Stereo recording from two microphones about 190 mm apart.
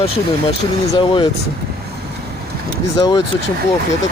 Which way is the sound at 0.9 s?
25° left (ahead or behind).